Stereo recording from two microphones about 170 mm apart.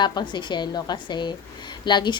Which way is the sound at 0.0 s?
25° left (ahead or behind).